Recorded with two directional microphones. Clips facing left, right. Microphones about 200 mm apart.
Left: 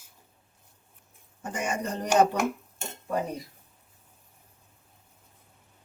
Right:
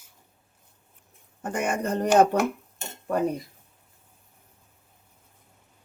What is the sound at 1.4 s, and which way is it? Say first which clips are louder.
Speech: right 4 dB; 60° right (ahead or behind).